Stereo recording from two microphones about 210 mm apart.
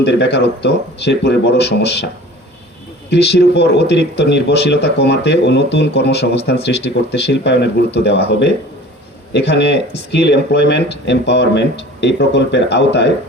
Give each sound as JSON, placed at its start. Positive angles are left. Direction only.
{"t": 0.0, "sound": "speech", "side_deg": 55}
{"t": 3.1, "sound": "speech", "side_deg": 55}